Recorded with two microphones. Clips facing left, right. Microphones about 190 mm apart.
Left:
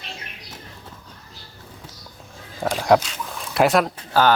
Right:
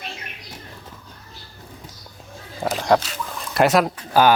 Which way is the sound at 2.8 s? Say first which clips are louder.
Left 2 dB; 10° left (ahead or behind).